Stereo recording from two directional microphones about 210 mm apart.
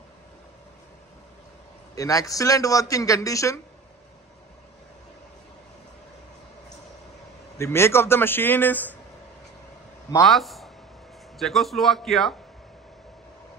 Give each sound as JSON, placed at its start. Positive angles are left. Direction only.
{"t": 2.0, "sound": "speech", "side_deg": 15}
{"t": 7.5, "sound": "speech", "side_deg": 10}
{"t": 10.2, "sound": "a man's voice", "side_deg": 0}